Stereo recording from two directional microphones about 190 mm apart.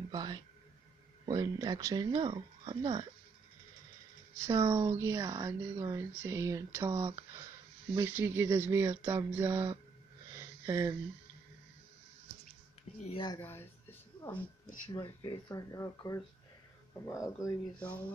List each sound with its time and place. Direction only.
0.1 s speech: 20° right (ahead or behind)
4.4 s a woman's voice: 15° right (ahead or behind)
13.0 s speech: 25° left (ahead or behind)
13.4 s a sound: 10° left (ahead or behind)
14.9 s speech: 25° left (ahead or behind); by 18.0 s 5° left (ahead or behind)